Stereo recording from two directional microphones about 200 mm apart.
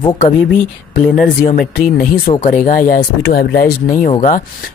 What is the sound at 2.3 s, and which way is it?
Speech, 30° left (ahead or behind).